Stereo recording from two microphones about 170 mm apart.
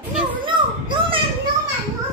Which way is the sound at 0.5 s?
30° right (ahead or behind).